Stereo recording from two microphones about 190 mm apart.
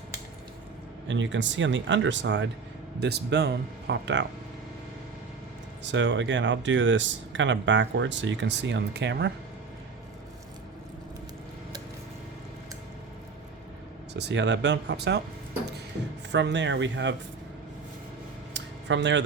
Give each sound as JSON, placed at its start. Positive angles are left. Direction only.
{"t": 1.0, "sound": "speech", "side_deg": -75}
{"t": 5.8, "sound": "speech", "side_deg": -75}
{"t": 14.1, "sound": "speech", "side_deg": -65}
{"t": 16.3, "sound": "speech", "side_deg": -70}
{"t": 18.5, "sound": "a sound", "side_deg": -70}